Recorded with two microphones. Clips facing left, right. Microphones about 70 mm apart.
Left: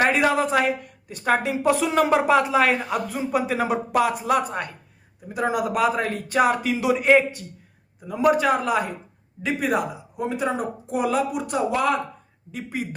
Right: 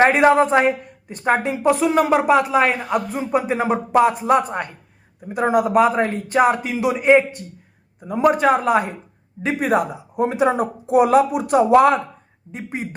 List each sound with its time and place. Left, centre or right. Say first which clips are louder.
0.2 s a man's voice: right 6 dB; right; by 7.3 s centre
8.0 s speech: right 3 dB; right
9.4 s speech: right 4 dB; right
10.5 s speech: right 8 dB; right
12.5 s speech: right 1 dB; right